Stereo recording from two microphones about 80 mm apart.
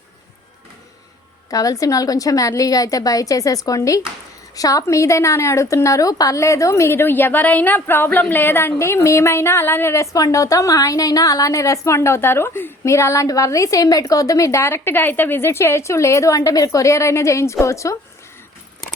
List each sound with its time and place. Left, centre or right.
1.5 s a woman's voice: left